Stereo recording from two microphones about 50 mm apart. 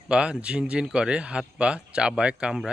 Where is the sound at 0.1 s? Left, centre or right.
Centre.